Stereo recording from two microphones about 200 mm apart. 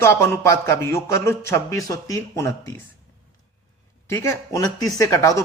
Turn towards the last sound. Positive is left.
turn(degrees=15)  # may be behind; listen again after turning